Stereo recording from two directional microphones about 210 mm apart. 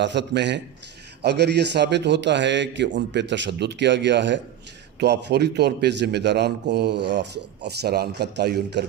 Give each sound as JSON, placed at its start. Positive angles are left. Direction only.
{"t": 0.0, "sound": "a man's voice", "side_deg": -55}